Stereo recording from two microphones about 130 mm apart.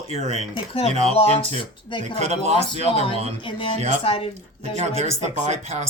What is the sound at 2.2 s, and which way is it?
Speech, 55° right (ahead or behind).